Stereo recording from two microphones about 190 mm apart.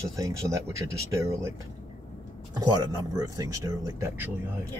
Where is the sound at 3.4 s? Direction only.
20° right (ahead or behind).